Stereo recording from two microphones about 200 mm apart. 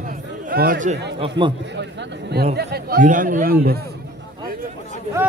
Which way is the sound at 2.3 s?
55° right (ahead or behind).